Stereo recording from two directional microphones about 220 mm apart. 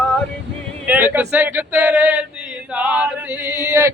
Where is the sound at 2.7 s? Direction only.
5° right (ahead or behind).